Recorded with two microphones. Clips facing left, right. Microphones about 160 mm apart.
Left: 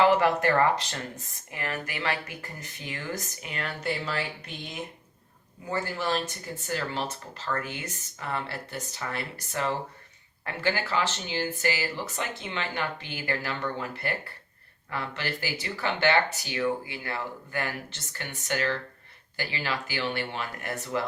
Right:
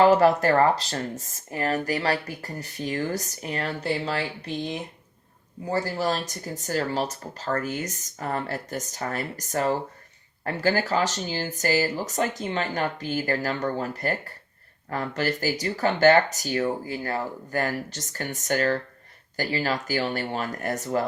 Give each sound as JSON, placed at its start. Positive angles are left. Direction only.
{"t": 0.0, "sound": "speech", "side_deg": -40}